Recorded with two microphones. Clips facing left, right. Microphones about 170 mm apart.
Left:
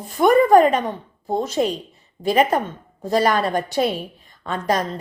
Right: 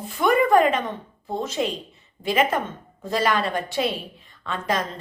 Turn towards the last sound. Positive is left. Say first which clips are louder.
# left 4 dB
turn(degrees=40)  # may be behind; listen again after turning